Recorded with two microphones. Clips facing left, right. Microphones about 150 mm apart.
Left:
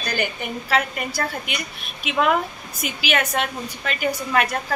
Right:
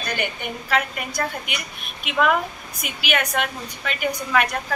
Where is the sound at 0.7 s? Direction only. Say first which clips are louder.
Left 1 dB; 30° left (ahead or behind).